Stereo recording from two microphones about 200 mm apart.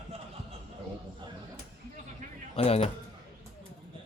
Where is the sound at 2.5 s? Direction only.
30° left (ahead or behind).